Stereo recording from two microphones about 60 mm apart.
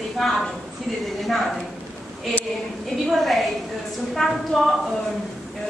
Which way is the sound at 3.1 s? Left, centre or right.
Centre.